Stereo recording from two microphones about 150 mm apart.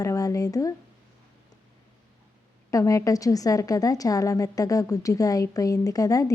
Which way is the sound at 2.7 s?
20° left (ahead or behind).